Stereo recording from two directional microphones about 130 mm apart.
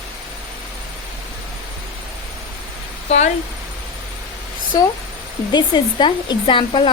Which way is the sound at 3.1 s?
60° left (ahead or behind).